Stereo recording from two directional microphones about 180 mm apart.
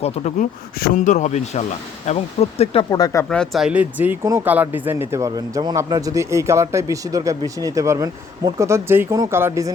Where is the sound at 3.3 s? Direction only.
Centre (ahead or behind).